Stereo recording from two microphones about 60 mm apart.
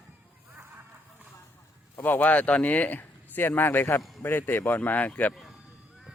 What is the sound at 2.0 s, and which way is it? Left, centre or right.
Speech, left.